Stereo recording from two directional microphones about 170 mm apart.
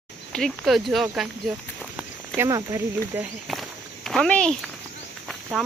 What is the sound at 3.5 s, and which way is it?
Walk, centre (ahead or behind).